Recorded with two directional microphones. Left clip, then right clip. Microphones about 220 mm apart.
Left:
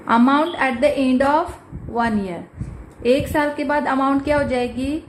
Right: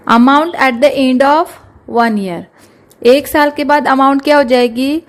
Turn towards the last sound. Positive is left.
turn(degrees=-50)  # may be behind; listen again after turning